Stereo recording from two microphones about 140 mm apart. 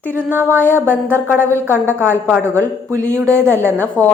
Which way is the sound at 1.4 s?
15° left (ahead or behind).